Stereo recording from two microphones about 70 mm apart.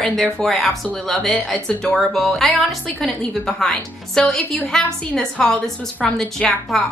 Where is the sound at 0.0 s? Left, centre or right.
Centre.